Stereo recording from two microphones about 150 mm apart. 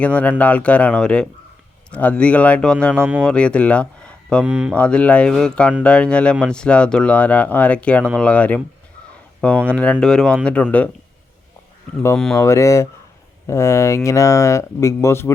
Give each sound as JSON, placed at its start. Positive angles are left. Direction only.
{"t": 0.0, "sound": "speech", "side_deg": 10}
{"t": 2.9, "sound": "speech", "side_deg": -15}
{"t": 3.2, "sound": "speech", "side_deg": 5}
{"t": 4.4, "sound": "speech", "side_deg": -10}
{"t": 4.7, "sound": "speech", "side_deg": 5}
{"t": 9.6, "sound": "speech", "side_deg": 10}
{"t": 12.1, "sound": "speech", "side_deg": 5}
{"t": 12.4, "sound": "speech", "side_deg": 20}